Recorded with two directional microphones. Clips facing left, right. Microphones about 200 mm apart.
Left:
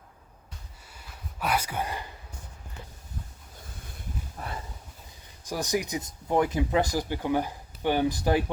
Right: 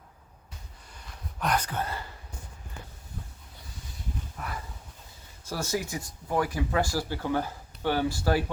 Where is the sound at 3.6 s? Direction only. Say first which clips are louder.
Left 1 dB; 55° left (ahead or behind).